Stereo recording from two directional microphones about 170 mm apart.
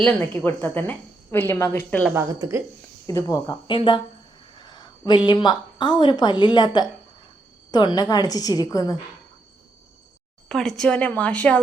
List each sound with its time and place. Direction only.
0.0 s a woman's voice: 10° left (ahead or behind)
2.1 s a woman's voice: 15° right (ahead or behind)
3.1 s a woman's voice: 20° left (ahead or behind)
10.5 s a woman's voice: centre (ahead or behind)